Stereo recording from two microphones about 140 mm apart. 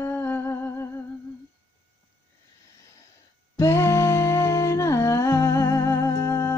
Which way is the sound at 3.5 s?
20° left (ahead or behind).